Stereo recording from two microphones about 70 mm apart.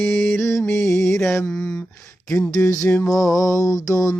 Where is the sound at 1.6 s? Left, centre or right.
Left.